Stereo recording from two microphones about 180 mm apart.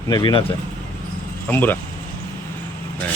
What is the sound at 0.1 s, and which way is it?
Speech, 25° left (ahead or behind).